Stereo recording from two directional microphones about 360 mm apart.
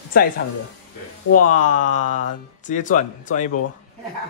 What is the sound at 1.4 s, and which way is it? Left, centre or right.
A man's voice, left.